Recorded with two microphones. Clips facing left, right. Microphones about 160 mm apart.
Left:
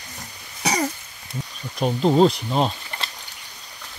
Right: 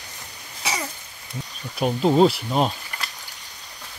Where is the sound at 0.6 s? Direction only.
40° left (ahead or behind).